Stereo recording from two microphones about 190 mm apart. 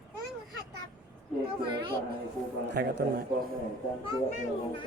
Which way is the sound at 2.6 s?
60° right (ahead or behind).